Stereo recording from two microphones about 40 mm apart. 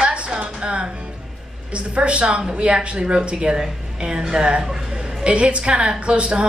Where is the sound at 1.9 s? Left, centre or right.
Right.